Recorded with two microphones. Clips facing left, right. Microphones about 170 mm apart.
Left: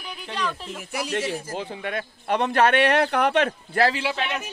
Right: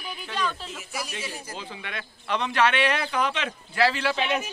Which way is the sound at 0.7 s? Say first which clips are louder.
Left 6 dB; 60° left (ahead or behind).